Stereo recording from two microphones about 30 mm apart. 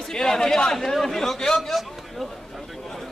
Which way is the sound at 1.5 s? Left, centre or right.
Centre.